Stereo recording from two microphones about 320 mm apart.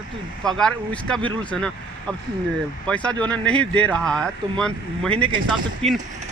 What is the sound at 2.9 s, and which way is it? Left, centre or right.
Speech, centre.